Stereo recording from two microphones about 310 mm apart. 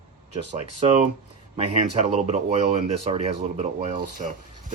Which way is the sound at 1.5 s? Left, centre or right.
Centre.